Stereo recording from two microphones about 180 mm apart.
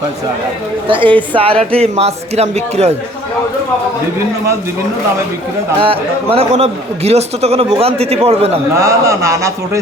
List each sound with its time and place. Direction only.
0.9 s a woman's voice: 30° right (ahead or behind)
6.3 s a man's voice: 35° right (ahead or behind)
8.7 s a man's voice: 15° right (ahead or behind)